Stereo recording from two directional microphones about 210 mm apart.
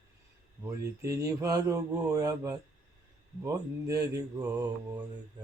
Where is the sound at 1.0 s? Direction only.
15° right (ahead or behind).